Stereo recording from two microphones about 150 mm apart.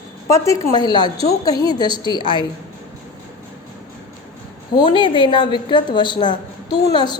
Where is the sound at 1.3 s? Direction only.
25° left (ahead or behind).